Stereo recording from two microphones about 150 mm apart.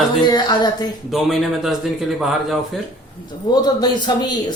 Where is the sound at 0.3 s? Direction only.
30° left (ahead or behind).